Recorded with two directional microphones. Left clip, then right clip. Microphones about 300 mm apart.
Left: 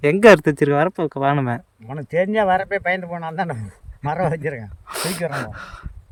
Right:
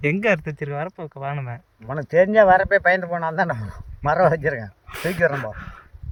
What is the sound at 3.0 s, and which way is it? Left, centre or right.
Speech, centre.